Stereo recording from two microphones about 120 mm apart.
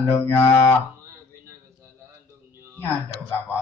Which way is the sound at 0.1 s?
20° left (ahead or behind).